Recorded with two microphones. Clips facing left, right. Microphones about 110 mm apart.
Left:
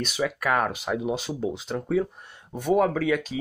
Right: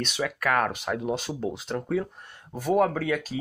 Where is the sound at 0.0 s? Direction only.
5° left (ahead or behind).